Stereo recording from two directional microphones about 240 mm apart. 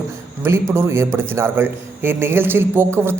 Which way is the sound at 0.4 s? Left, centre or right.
Centre.